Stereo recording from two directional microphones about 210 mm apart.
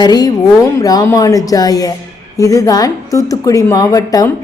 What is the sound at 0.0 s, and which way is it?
A woman's voice, 20° left (ahead or behind).